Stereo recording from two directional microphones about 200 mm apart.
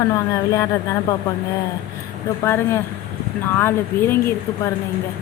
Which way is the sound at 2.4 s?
10° left (ahead or behind).